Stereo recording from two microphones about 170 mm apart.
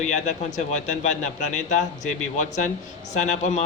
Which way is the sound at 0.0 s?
45° left (ahead or behind).